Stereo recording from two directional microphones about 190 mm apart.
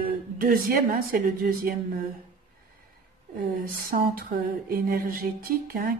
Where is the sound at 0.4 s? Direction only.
50° right (ahead or behind).